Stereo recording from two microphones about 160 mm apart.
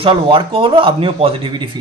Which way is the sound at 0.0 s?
35° right (ahead or behind).